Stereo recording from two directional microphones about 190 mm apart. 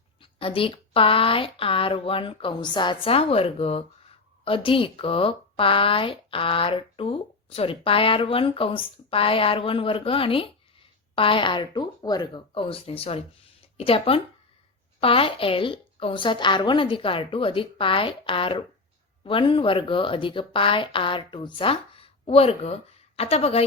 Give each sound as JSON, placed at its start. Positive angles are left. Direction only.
{"t": 0.2, "sound": "speech", "side_deg": 30}